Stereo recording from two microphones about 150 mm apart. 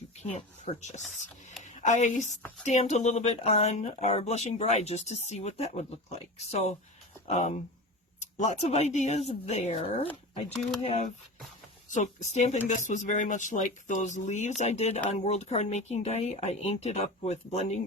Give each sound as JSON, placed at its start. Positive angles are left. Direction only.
{"t": 0.2, "sound": "speech", "side_deg": 50}
{"t": 11.9, "sound": "speech", "side_deg": 50}